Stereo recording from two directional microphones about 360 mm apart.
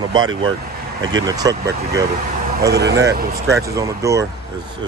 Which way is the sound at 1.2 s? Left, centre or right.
Centre.